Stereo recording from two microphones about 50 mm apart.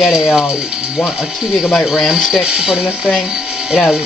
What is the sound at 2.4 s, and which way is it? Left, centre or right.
Speech, centre.